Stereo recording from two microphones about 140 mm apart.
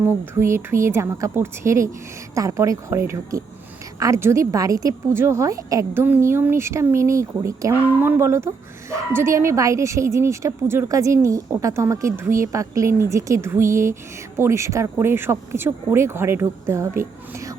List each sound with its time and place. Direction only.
0.0 s a woman's voice: 20° right (ahead or behind)